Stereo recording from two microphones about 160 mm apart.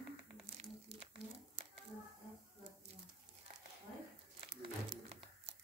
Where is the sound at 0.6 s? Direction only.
40° right (ahead or behind).